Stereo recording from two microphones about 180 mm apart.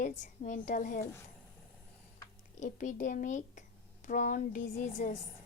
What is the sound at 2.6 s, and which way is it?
A child's voice, 45° left (ahead or behind).